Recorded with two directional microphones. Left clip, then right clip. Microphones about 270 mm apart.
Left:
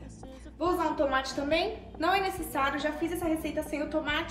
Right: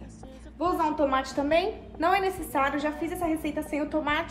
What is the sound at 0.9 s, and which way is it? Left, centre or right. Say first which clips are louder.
A woman's voice: right 3 dB; right.